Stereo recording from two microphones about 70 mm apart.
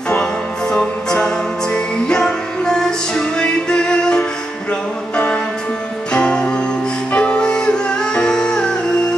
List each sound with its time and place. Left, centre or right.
0.1 s music: centre